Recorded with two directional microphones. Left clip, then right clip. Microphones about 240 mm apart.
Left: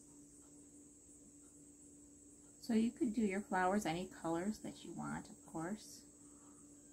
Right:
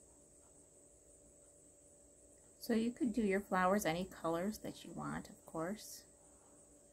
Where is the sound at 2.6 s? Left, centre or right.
Right.